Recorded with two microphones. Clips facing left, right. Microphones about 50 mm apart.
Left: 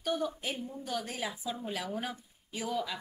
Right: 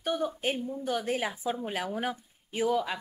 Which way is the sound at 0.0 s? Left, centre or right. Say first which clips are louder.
Right 3 dB; right.